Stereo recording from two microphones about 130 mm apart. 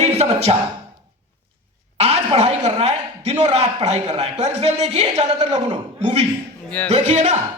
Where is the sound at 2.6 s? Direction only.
55° right (ahead or behind).